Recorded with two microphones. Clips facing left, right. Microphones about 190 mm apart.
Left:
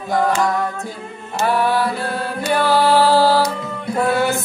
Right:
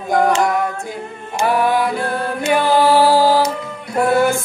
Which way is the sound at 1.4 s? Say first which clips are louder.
Right 2 dB; 15° right (ahead or behind).